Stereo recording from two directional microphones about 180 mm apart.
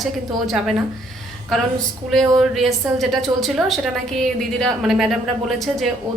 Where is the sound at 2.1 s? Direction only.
Centre (ahead or behind).